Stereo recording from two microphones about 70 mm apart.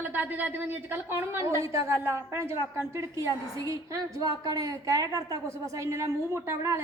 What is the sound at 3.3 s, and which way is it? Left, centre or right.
A woman's voice, right.